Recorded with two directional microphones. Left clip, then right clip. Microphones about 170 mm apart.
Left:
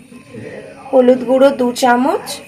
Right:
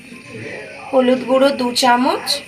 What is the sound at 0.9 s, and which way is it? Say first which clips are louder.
Speech: left 4 dB; 30° left (ahead or behind).